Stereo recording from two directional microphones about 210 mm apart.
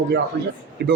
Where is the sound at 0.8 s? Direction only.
50° right (ahead or behind).